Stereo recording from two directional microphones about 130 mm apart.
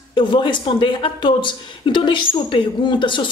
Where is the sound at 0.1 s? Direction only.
40° left (ahead or behind).